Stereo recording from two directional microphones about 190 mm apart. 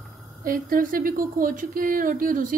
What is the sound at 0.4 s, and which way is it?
Speech, 50° right (ahead or behind).